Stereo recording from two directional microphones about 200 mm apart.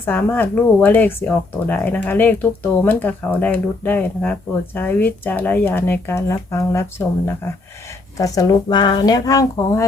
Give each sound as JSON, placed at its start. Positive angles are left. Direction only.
{"t": 0.0, "sound": "speech", "side_deg": 10}
{"t": 8.2, "sound": "speech", "side_deg": 20}